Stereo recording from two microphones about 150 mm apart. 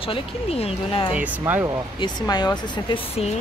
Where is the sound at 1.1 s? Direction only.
10° right (ahead or behind).